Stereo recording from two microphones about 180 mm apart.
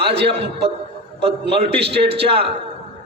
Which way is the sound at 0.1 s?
30° right (ahead or behind).